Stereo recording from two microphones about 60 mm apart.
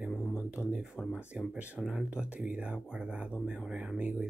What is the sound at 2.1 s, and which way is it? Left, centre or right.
Speech, centre.